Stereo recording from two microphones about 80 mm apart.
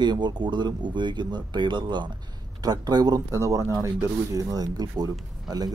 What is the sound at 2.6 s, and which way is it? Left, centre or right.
Speech, right.